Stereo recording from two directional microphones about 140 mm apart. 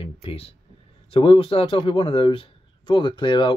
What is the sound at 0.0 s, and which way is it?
Speech, 40° left (ahead or behind).